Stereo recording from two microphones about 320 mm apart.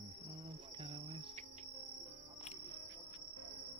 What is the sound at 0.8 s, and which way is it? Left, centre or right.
Cricket, centre.